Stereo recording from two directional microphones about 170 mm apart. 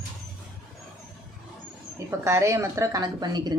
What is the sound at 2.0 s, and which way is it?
Speech, 15° right (ahead or behind).